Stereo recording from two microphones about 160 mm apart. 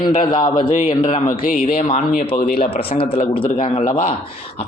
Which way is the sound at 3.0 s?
35° left (ahead or behind).